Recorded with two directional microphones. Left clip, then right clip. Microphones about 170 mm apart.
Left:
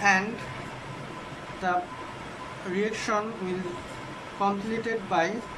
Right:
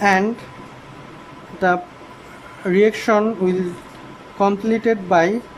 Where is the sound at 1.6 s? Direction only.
45° right (ahead or behind).